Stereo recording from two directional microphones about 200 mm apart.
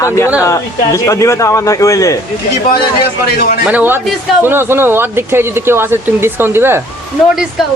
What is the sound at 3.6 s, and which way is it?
Speech, 10° right (ahead or behind).